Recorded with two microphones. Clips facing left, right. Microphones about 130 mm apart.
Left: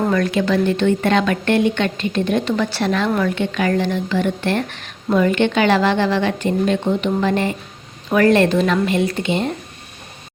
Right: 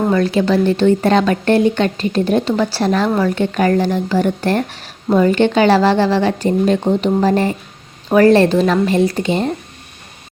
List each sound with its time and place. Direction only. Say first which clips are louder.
0.0 s speech: right 3 dB; 30° right (ahead or behind)